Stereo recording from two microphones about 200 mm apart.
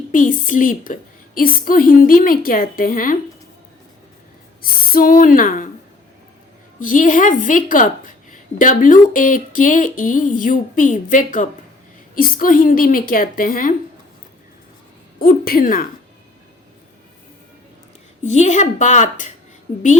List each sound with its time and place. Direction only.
0.1 s a woman's voice: 40° left (ahead or behind)
4.6 s a woman's voice: 45° left (ahead or behind)
6.7 s a woman's voice: 40° left (ahead or behind)
15.2 s a woman's voice: 50° left (ahead or behind)
18.2 s a woman's voice: 35° left (ahead or behind)